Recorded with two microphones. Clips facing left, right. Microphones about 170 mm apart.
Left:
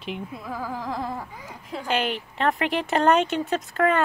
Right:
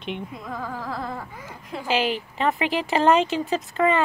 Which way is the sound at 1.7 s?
5° right (ahead or behind).